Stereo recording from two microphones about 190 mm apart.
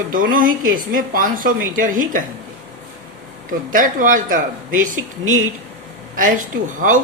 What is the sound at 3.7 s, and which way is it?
Speech, 45° right (ahead or behind).